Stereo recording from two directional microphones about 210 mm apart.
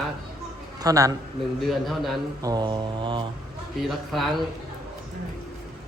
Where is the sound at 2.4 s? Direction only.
20° right (ahead or behind).